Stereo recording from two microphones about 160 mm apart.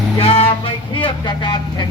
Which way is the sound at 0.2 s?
40° left (ahead or behind).